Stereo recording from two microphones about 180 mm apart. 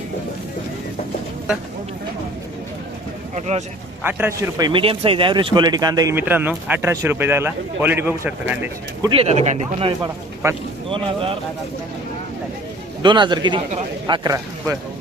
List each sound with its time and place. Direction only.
3.3 s speech: 40° right (ahead or behind)
4.0 s a man's voice: 10° right (ahead or behind)
9.0 s speech: 35° right (ahead or behind)
13.0 s a man's voice: 25° right (ahead or behind)